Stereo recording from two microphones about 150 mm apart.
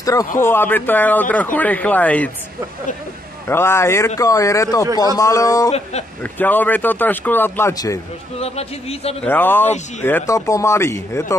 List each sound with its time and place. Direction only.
0.0 s speech: 25° left (ahead or behind)
3.4 s speech: 15° left (ahead or behind)
6.3 s speech: 10° left (ahead or behind)
8.4 s speech: 45° left (ahead or behind)
9.2 s speech: 15° left (ahead or behind)